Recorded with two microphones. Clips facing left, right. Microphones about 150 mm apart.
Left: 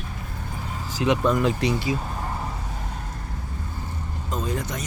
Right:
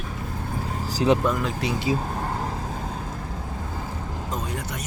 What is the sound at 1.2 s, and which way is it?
Speech, 5° right (ahead or behind).